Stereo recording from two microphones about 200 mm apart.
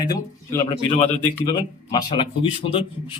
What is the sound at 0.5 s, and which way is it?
Speech, 20° left (ahead or behind).